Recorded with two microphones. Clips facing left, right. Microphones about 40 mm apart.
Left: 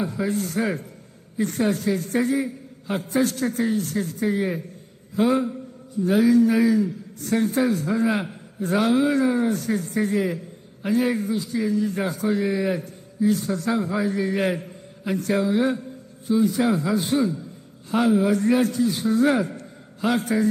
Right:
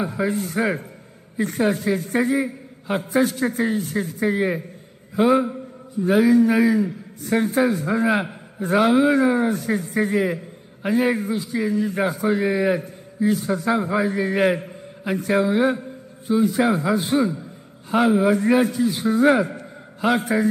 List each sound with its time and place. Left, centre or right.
0.0 s a man's voice: centre